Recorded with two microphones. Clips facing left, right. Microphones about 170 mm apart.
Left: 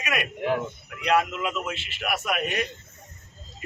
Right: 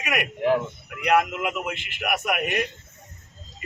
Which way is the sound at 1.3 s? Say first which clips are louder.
Right 1 dB; 15° right (ahead or behind).